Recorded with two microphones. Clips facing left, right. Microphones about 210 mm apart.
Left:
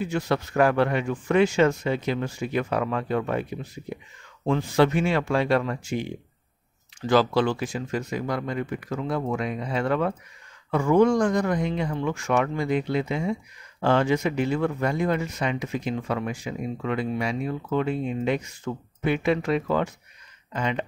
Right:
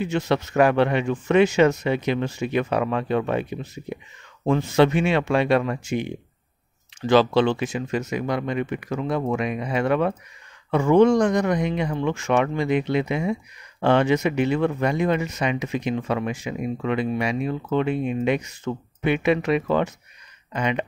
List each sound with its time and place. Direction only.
0.0 s speech: 20° right (ahead or behind)
4.5 s speech: 20° right (ahead or behind)